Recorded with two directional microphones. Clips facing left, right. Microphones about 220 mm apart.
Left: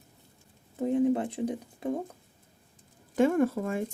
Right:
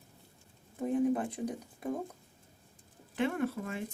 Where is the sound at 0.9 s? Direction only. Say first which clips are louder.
Left 4 dB; 25° left (ahead or behind).